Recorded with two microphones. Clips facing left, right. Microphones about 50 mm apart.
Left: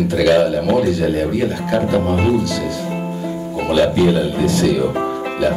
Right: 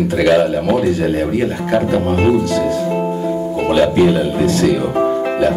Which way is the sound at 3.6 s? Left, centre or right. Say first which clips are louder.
Right 1 dB; right.